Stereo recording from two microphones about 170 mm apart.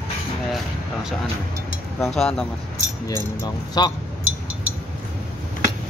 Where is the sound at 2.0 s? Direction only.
Centre (ahead or behind).